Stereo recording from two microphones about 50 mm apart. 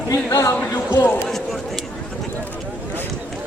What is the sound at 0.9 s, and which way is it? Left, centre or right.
Speech, left.